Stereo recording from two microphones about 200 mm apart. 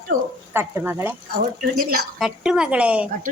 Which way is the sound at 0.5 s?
10° right (ahead or behind).